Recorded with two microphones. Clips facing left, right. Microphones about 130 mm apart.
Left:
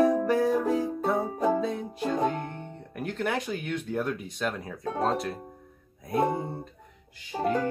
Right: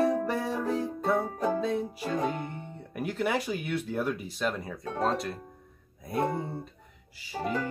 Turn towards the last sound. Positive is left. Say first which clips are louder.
# left 5 dB
turn(degrees=30)  # may be behind; listen again after turning